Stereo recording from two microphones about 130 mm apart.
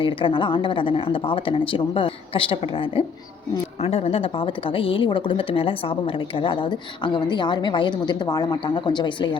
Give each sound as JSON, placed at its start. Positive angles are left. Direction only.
{"t": 0.0, "sound": "a woman's voice", "side_deg": 40}
{"t": 3.8, "sound": "a woman's voice", "side_deg": 55}